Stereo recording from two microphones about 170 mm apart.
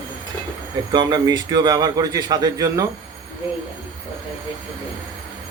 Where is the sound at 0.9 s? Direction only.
25° right (ahead or behind).